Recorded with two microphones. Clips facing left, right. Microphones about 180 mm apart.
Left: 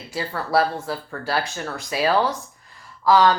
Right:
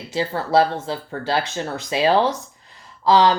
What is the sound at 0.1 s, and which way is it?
Speech, 25° right (ahead or behind).